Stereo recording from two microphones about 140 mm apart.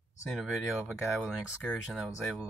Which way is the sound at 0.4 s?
Centre (ahead or behind).